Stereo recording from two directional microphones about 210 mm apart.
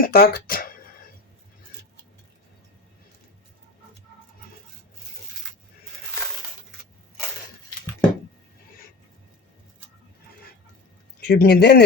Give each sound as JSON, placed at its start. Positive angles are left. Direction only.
{"t": 0.0, "sound": "speech", "side_deg": 45}
{"t": 11.2, "sound": "speech", "side_deg": 50}